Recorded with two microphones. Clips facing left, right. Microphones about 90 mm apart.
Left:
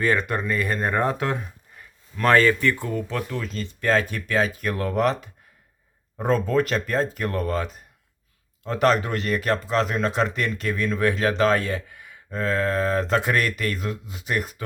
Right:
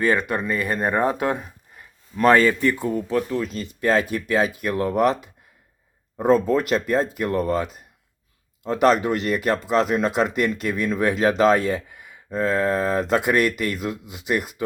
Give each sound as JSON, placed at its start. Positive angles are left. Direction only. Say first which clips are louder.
{"t": 0.0, "sound": "speech", "louder": "right 2 dB", "side_deg": -5}
{"t": 8.6, "sound": "speech", "louder": "right 3 dB", "side_deg": -15}